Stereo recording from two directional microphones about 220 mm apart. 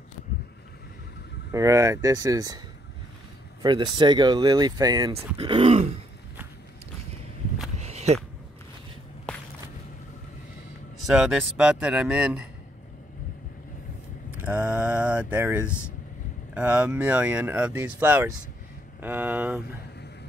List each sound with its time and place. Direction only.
1.5 s speech: 15° right (ahead or behind)
3.6 s speech: 20° right (ahead or behind)
7.8 s a sound: 30° right (ahead or behind)
9.3 s walk: 5° left (ahead or behind)
11.1 s speech: 5° right (ahead or behind)
14.4 s speech: 5° right (ahead or behind)